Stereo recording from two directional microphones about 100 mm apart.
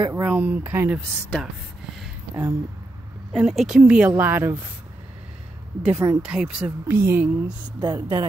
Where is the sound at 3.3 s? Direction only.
Centre (ahead or behind); by 4.5 s 20° right (ahead or behind).